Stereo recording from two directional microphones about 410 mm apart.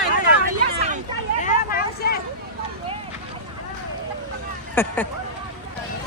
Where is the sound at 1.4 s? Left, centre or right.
Centre.